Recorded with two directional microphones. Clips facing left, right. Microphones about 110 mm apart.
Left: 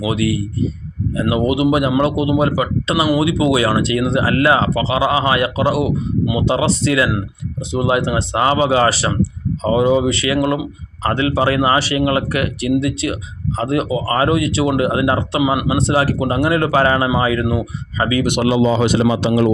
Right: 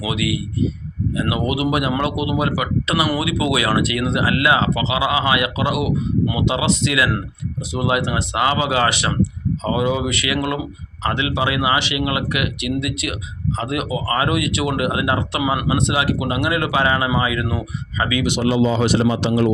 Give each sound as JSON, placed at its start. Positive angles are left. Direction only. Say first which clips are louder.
{"t": 0.0, "sound": "a man's voice", "louder": "left 4 dB", "side_deg": 35}
{"t": 18.3, "sound": "speech", "louder": "left 3 dB", "side_deg": 65}